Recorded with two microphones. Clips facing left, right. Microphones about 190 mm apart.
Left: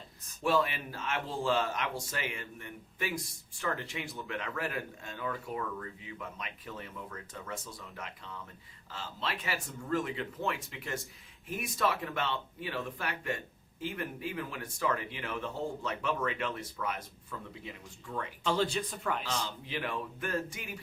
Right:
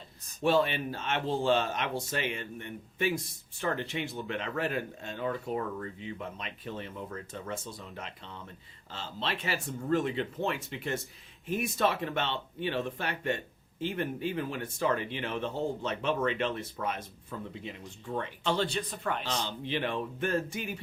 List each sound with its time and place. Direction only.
0.4 s speech: 25° right (ahead or behind)
18.4 s speech: 5° left (ahead or behind)
19.3 s speech: 25° right (ahead or behind)